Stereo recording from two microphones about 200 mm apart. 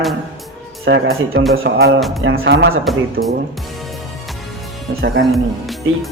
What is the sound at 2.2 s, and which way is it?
Music, 65° right (ahead or behind).